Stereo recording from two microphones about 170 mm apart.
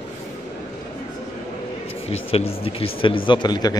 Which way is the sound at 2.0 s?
35° left (ahead or behind).